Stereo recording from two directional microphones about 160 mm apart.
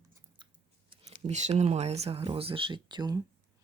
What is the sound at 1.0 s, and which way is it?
Speech, 45° right (ahead or behind).